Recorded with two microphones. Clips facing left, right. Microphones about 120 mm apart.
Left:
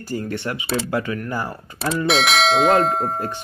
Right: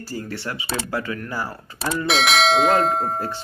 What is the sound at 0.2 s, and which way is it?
Speech, 20° left (ahead or behind).